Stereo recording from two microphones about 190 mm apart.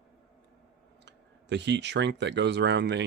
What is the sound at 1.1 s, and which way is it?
Speech, 65° right (ahead or behind).